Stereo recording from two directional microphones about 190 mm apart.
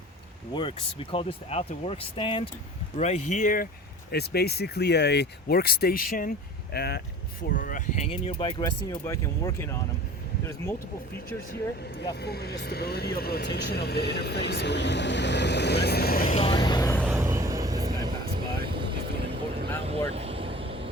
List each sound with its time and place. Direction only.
0.5 s speech: 25° left (ahead or behind)
3.0 s speech: 40° left (ahead or behind)
4.1 s speech: 55° left (ahead or behind)
6.7 s speech: 60° left (ahead or behind)
7.5 s speech: 45° left (ahead or behind); by 10.8 s 15° left (ahead or behind)
11.9 s speech: 55° left (ahead or behind)
16.3 s vehicle: 30° left (ahead or behind)
17.1 s vehicle: 15° right (ahead or behind)
18.3 s vehicle: 55° right (ahead or behind)
19.8 s vehicle: 30° right (ahead or behind)